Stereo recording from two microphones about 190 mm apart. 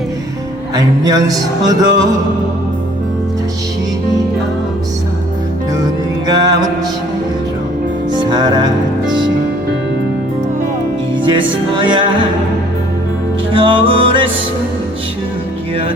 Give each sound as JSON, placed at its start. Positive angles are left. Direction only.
{"t": 1.0, "sound": "a man's voice", "side_deg": -20}
{"t": 5.8, "sound": "music", "side_deg": -20}
{"t": 8.1, "sound": "music", "side_deg": -20}
{"t": 11.3, "sound": "a man's voice", "side_deg": -25}
{"t": 13.5, "sound": "a man's voice", "side_deg": -25}